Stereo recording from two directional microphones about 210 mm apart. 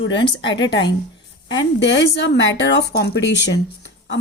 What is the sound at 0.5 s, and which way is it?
Speech, 60° left (ahead or behind).